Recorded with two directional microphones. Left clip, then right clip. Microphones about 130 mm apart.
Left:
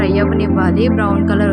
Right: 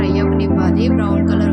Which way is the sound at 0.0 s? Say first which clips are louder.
Left 2 dB; 45° left (ahead or behind).